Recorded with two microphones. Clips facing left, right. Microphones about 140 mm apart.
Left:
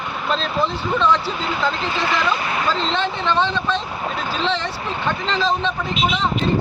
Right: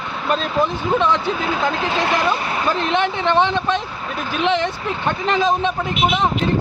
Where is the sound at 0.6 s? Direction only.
15° right (ahead or behind).